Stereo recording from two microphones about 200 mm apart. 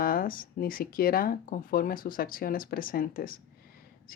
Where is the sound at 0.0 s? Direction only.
45° left (ahead or behind).